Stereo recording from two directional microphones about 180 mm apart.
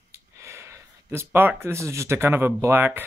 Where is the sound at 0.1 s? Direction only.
15° right (ahead or behind).